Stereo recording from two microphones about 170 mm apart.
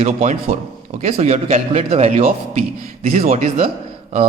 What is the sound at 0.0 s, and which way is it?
A man's voice, 40° right (ahead or behind).